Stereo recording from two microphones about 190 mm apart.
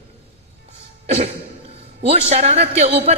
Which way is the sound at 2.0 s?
35° right (ahead or behind).